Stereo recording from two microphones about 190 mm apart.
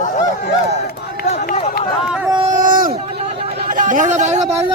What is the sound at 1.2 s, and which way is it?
Run, 35° left (ahead or behind).